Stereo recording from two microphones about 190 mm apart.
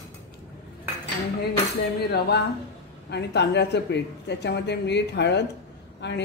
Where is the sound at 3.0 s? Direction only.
65° left (ahead or behind).